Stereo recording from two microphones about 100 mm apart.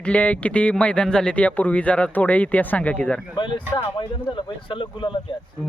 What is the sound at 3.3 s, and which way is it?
Speech, 55° left (ahead or behind).